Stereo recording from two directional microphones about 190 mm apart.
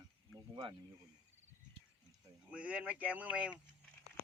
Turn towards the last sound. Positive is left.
turn(degrees=-5)  # may be behind; listen again after turning